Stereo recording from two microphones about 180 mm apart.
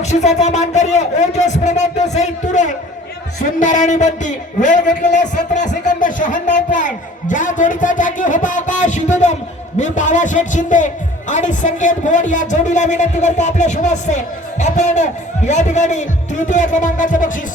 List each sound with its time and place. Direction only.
0.0 s a man's voice: 40° left (ahead or behind)